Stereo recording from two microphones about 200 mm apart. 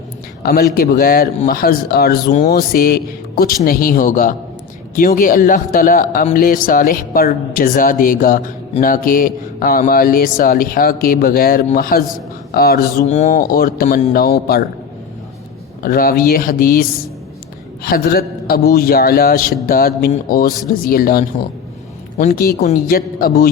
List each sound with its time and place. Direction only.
0.4 s speech: 50° left (ahead or behind)
13.1 s speech: 35° left (ahead or behind); by 14.6 s 50° left (ahead or behind)
15.8 s speech: 45° left (ahead or behind)
17.8 s a man's voice: 50° left (ahead or behind)